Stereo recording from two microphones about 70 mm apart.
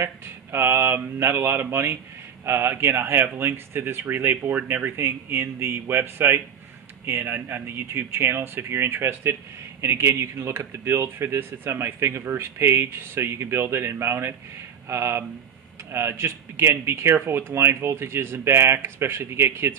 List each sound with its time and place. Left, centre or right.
0.0 s speech: right